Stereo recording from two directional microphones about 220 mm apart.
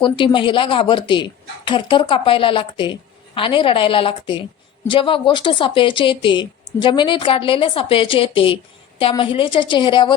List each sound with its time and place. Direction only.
0.3 s speech: 20° left (ahead or behind)